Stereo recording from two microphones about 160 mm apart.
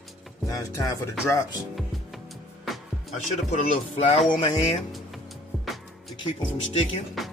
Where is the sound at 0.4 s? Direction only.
20° left (ahead or behind).